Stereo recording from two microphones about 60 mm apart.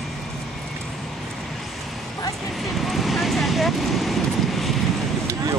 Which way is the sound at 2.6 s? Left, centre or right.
Centre.